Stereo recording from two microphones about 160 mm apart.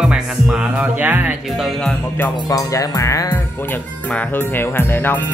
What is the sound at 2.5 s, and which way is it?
Speech, 20° left (ahead or behind).